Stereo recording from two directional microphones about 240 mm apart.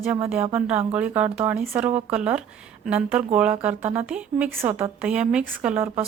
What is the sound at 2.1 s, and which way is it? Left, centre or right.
Speech, centre.